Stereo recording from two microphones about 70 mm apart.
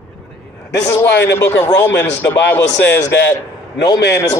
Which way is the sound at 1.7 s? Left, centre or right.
Left.